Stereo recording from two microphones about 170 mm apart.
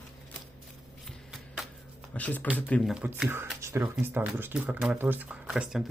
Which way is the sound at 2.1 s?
10° left (ahead or behind).